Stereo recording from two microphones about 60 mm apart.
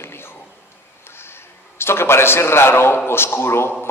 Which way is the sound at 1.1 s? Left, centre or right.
Left.